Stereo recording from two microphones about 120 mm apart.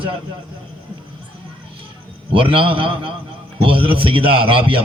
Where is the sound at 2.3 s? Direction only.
45° right (ahead or behind).